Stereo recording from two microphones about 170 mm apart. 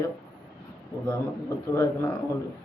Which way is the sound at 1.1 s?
15° left (ahead or behind).